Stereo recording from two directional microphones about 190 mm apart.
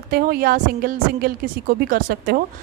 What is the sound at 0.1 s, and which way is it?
Speech, 50° right (ahead or behind).